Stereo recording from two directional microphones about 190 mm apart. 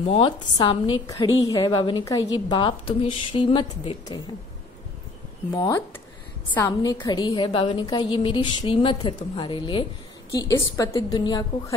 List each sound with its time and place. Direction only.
0.0 s a woman's voice: 30° left (ahead or behind)
5.5 s a woman's voice: 15° left (ahead or behind)